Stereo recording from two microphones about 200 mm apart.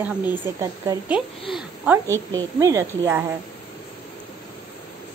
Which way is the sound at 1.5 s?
5° right (ahead or behind).